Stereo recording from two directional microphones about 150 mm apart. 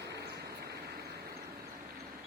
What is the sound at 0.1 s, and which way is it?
Vehicle, 90° right.